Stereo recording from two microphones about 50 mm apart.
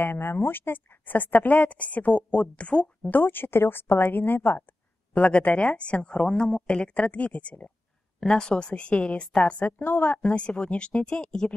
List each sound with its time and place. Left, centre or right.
0.0 s a woman's voice: left
3.1 s a woman's voice: left
8.2 s a woman's voice: centre; by 10.3 s left
10.3 s a woman's voice: left